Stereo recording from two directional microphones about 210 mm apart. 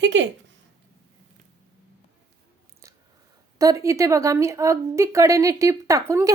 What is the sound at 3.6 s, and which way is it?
A woman's voice, 15° right (ahead or behind).